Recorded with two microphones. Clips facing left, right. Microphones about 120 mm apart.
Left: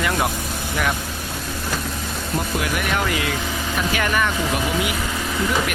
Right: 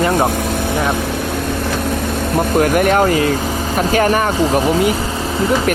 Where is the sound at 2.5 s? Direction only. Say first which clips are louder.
Right 13 dB; 45° right (ahead or behind).